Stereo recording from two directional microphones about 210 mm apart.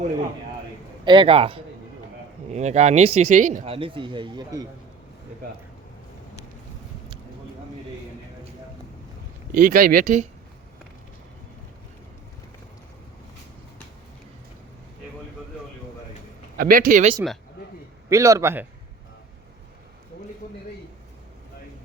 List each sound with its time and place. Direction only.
1.0 s speech: 25° right (ahead or behind)
9.5 s speech: 40° right (ahead or behind)
16.6 s speech: 45° right (ahead or behind)
18.1 s a man's voice: 15° right (ahead or behind)